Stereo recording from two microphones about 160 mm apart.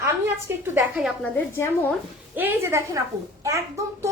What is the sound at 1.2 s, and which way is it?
Speech, 15° left (ahead or behind).